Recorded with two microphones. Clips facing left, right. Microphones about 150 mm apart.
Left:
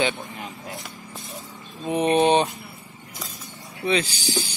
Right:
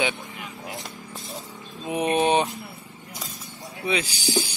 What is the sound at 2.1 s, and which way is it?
Speech, 10° right (ahead or behind).